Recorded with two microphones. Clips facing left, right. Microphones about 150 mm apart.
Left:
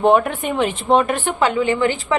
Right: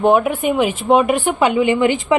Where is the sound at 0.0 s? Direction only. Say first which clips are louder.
Right 1 dB; 5° right (ahead or behind).